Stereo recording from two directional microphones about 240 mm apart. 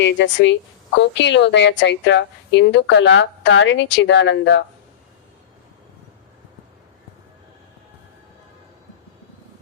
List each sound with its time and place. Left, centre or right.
0.0 s a woman's voice: left